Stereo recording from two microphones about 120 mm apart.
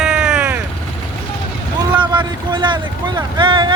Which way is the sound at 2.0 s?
40° right (ahead or behind).